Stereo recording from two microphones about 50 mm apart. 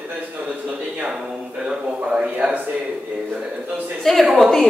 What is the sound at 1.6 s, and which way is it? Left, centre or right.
Speech, centre.